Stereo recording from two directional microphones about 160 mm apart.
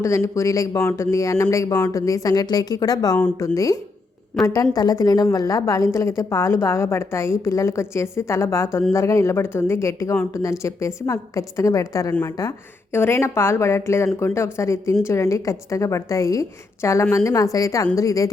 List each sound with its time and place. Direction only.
0.3 s a woman's voice: 20° left (ahead or behind)